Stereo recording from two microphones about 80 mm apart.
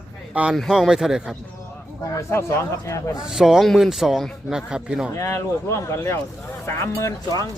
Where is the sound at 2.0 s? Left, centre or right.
Left.